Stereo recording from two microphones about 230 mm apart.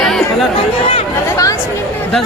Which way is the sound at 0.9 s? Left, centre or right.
Centre.